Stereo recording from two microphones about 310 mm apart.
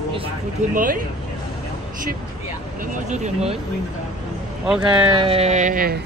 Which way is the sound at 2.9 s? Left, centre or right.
Right.